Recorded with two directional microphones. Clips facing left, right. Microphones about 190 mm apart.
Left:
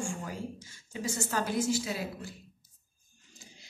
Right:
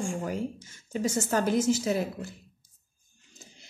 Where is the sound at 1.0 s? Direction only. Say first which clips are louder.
Right 6 dB; 50° right (ahead or behind).